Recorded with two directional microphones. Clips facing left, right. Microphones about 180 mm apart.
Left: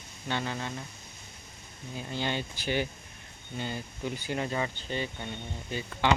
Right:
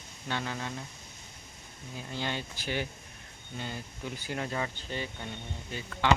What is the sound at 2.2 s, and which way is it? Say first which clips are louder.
Speech: left 3 dB; centre (ahead or behind).